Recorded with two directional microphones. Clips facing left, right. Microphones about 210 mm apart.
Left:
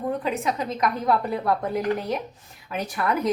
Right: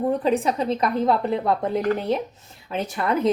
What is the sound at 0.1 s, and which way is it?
A woman's voice, 30° right (ahead or behind).